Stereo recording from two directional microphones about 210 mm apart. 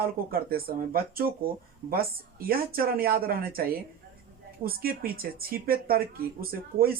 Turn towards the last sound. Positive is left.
turn(degrees=-45)  # may be behind; listen again after turning